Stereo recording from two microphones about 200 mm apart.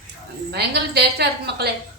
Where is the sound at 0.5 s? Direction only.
55° right (ahead or behind).